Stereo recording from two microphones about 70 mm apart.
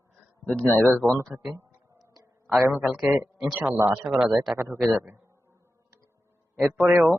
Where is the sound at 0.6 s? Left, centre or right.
Centre.